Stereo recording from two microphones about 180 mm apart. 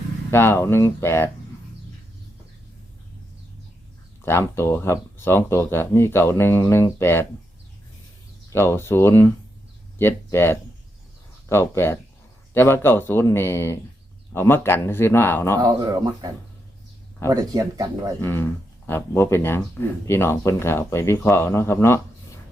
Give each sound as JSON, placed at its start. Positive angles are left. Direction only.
{"t": 0.3, "sound": "speech", "side_deg": 15}
{"t": 4.2, "sound": "speech", "side_deg": 15}
{"t": 8.5, "sound": "speech", "side_deg": 15}
{"t": 15.5, "sound": "speech", "side_deg": -20}
{"t": 18.2, "sound": "speech", "side_deg": 15}